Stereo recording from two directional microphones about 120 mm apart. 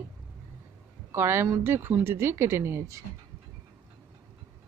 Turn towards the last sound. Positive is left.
turn(degrees=-25)  # may be behind; listen again after turning